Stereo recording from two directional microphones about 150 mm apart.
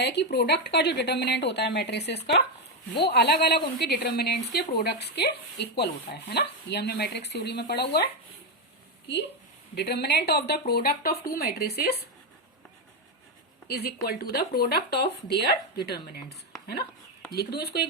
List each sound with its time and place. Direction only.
0.0 s speech: 90° left
9.7 s speech: 90° left
13.7 s speech: 90° left
17.3 s speech: 90° left